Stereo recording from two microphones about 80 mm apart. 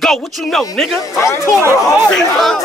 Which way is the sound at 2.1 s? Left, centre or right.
Centre.